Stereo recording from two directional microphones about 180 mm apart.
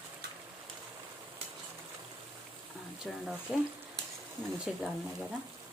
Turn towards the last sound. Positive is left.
turn(degrees=-5)  # may be behind; listen again after turning